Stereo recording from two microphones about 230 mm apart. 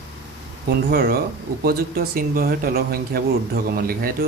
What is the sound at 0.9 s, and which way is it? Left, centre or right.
Speech, right.